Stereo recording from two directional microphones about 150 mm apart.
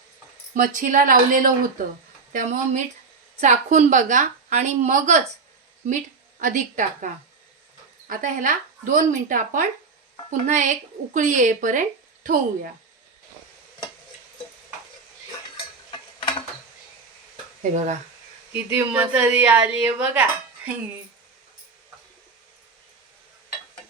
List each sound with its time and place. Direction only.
0.5 s a woman's voice: 65° right (ahead or behind)
6.4 s a woman's voice: 60° right (ahead or behind)
15.5 s stir: 35° left (ahead or behind)
17.6 s a woman's voice: 50° right (ahead or behind)
18.5 s a woman's voice: 10° right (ahead or behind)